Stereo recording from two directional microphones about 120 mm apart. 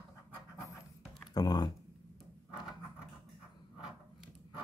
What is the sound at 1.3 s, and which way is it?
Speech, 35° left (ahead or behind).